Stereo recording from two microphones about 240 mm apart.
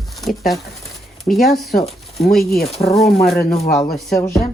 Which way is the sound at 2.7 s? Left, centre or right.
Left.